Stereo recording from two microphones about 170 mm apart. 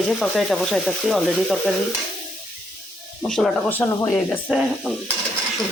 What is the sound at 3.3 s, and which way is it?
Speech, 5° left (ahead or behind).